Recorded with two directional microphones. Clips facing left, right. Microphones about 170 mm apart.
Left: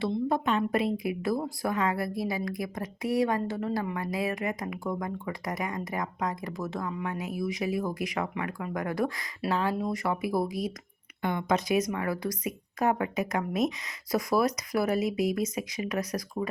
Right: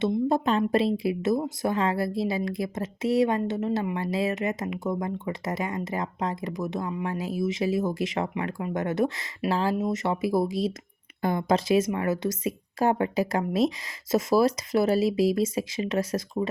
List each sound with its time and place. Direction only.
0.3 s speech: 30° right (ahead or behind)